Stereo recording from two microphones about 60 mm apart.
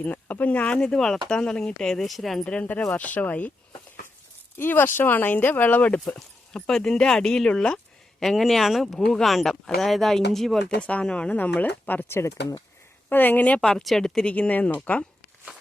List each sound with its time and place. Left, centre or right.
0.0 s speech: left
0.9 s speech: centre
2.4 s speech: centre
2.9 s speech: left
4.5 s speech: left
6.1 s speech: centre
8.2 s speech: centre
10.8 s speech: centre
12.0 s speech: left
13.1 s speech: left
13.6 s speech: centre
14.3 s speech: left